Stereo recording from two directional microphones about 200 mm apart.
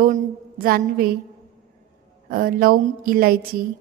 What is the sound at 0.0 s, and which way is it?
A woman's voice, 40° right (ahead or behind).